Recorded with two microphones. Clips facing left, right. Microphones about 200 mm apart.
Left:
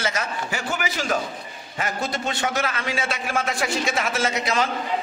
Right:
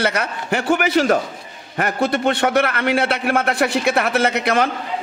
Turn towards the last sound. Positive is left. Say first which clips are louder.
# right 6 dB
turn(degrees=-60)  # may be behind; listen again after turning